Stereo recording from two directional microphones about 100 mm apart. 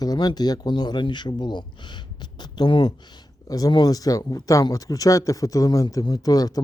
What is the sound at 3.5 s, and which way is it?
Speech, 35° left (ahead or behind).